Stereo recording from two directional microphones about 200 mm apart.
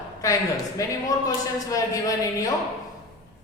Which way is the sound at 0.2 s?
15° left (ahead or behind).